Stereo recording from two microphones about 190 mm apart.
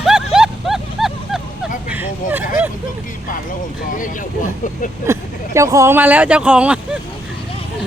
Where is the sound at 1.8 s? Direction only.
10° right (ahead or behind).